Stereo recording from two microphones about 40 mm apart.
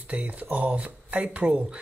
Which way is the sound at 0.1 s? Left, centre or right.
Right.